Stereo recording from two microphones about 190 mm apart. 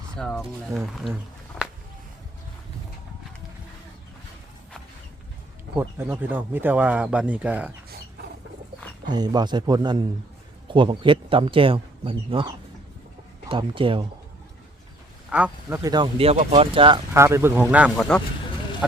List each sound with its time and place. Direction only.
0.2 s speech: centre (ahead or behind)
6.0 s speech: 10° right (ahead or behind)
9.0 s speech: 20° right (ahead or behind)
13.5 s speech: 25° right (ahead or behind)
15.3 s speech: 5° right (ahead or behind)
15.8 s speech: 20° right (ahead or behind)
17.2 s speech: 15° right (ahead or behind)